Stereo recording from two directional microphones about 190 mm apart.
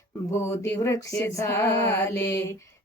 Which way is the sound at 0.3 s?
15° left (ahead or behind).